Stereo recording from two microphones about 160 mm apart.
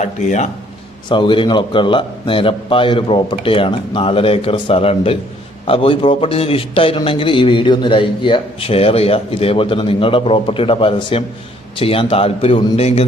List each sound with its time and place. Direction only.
0.0 s speech: 45° left (ahead or behind)
1.1 s a man's voice: 30° left (ahead or behind)